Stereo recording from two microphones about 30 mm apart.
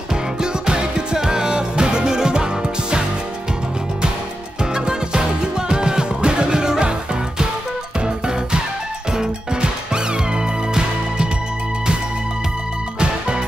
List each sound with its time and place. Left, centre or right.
0.1 s music: right
4.7 s music: right
9.1 s music: right